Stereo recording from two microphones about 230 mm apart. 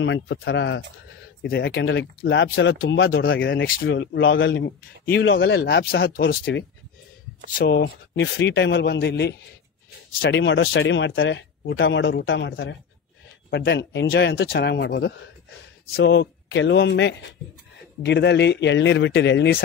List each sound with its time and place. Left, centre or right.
0.0 s speech: left
3.6 s speech: left
3.9 s speech: left